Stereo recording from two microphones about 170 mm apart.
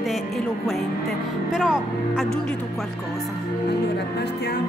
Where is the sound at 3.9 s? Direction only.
75° left (ahead or behind).